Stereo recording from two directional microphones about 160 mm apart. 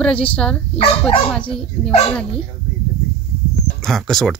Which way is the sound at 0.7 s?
35° left (ahead or behind).